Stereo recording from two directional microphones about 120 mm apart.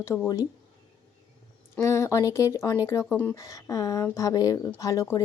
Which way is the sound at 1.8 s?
25° left (ahead or behind).